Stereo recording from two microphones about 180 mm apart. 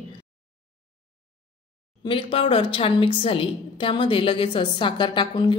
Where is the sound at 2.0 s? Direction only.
30° left (ahead or behind).